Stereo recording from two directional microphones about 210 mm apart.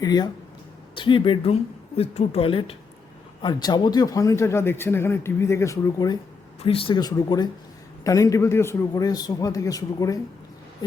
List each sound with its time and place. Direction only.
0.0 s a woman's voice: 20° left (ahead or behind)